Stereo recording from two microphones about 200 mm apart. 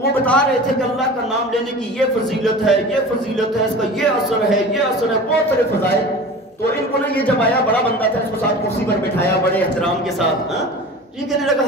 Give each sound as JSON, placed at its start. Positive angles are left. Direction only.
{"t": 0.2, "sound": "a man's voice", "side_deg": 5}
{"t": 2.4, "sound": "a man's voice", "side_deg": 0}